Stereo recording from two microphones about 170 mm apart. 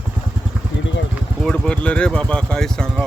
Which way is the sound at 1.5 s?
5° left (ahead or behind).